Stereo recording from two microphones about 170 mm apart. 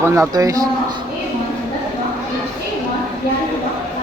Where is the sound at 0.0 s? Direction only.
15° right (ahead or behind).